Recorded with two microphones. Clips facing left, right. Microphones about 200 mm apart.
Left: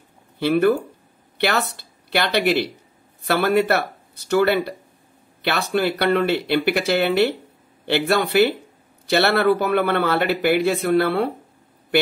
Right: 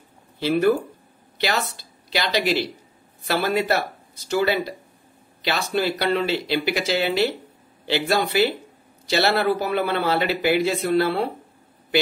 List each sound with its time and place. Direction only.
0.4 s a man's voice: 55° left (ahead or behind)